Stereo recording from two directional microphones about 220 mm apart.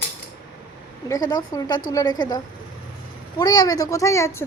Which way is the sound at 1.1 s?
15° left (ahead or behind).